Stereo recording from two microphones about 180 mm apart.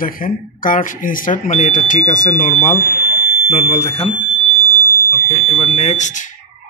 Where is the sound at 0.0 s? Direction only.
50° left (ahead or behind).